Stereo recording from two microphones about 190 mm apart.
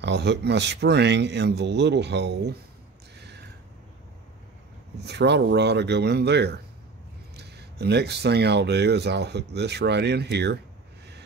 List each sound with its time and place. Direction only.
0.0 s speech: 65° right (ahead or behind)
5.0 s speech: 65° right (ahead or behind)